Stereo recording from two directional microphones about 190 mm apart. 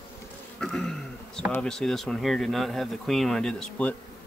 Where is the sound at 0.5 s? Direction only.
5° left (ahead or behind).